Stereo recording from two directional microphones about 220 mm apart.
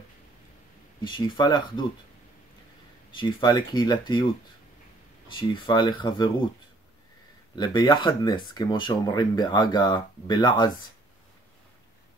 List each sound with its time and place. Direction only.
1.0 s speech: 20° left (ahead or behind)
3.2 s speech: 20° left (ahead or behind)
5.5 s speech: 20° left (ahead or behind)
7.5 s speech: 20° left (ahead or behind)